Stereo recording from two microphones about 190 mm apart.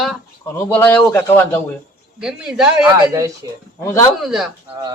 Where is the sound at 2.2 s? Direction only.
5° right (ahead or behind).